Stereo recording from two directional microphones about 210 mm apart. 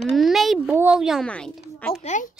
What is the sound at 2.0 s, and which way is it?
Speech, 35° left (ahead or behind).